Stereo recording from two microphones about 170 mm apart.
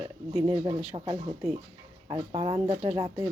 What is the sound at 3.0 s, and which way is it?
Speech, 25° right (ahead or behind).